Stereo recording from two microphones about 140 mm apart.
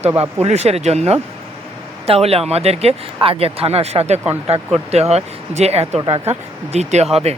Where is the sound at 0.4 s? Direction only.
50° right (ahead or behind).